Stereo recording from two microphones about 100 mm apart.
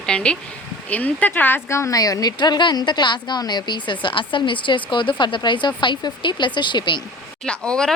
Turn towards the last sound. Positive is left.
turn(degrees=10)  # may be behind; listen again after turning